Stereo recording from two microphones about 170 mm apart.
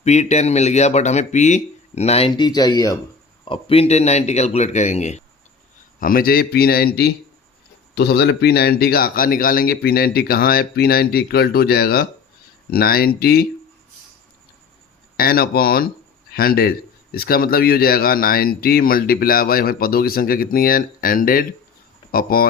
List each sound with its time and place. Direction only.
0.0 s speech: 40° left (ahead or behind)
6.0 s a man's voice: 55° left (ahead or behind)
15.1 s a man's voice: 60° left (ahead or behind)